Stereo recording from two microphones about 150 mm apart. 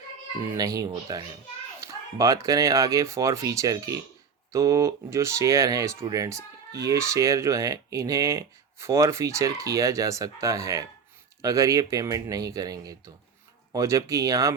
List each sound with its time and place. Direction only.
0.5 s speech: 25° right (ahead or behind)